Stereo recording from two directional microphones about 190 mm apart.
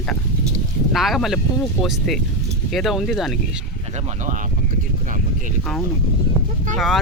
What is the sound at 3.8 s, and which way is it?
Speech, 35° right (ahead or behind).